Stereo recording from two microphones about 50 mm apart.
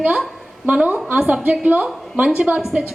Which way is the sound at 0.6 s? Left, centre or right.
Right.